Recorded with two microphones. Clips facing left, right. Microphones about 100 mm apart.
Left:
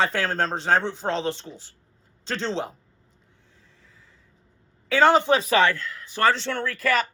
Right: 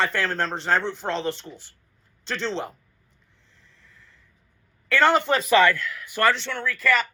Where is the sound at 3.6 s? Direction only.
70° right (ahead or behind).